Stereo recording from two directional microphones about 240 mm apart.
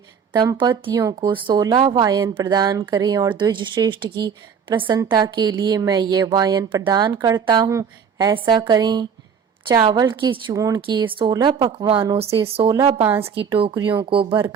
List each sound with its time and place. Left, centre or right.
0.3 s a woman's voice: centre
12.7 s a woman's voice: centre
13.3 s a woman's voice: right